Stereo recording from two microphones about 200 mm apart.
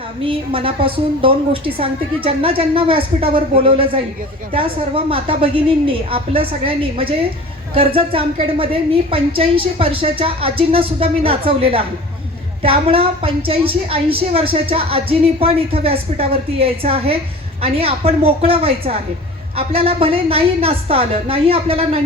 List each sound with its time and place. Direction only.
0.2 s a woman's voice: 25° right (ahead or behind)